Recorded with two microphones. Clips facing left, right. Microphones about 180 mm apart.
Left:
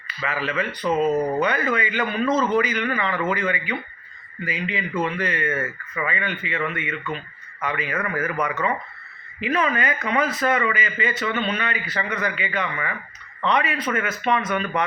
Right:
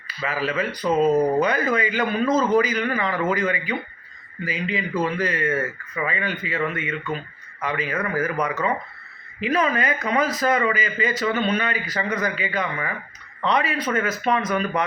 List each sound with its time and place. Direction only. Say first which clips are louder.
0.2 s speech: right 1 dB; 40° right (ahead or behind)